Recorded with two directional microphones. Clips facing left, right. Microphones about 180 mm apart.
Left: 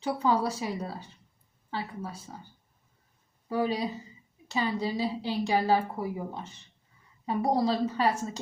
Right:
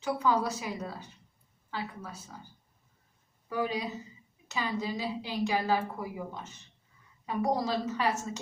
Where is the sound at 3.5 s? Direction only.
35° left (ahead or behind).